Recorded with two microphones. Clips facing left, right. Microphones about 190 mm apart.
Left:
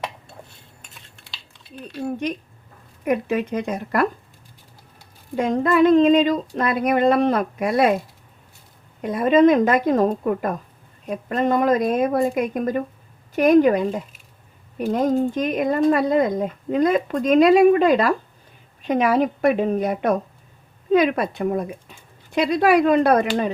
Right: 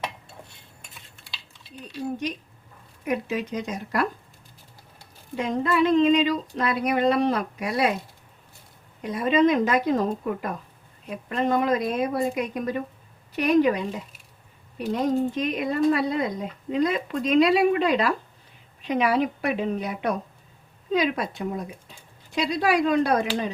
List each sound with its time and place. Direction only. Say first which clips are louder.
1.9 s speech: left 4 dB; 55° left (ahead or behind)
5.4 s speech: left 6 dB; 50° left (ahead or behind)
9.0 s speech: left 5 dB; 50° left (ahead or behind)